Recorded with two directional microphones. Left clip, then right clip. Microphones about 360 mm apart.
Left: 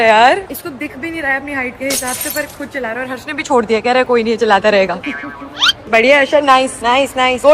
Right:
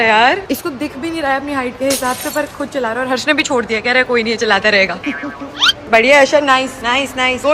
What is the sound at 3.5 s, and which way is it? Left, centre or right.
A woman's voice, centre.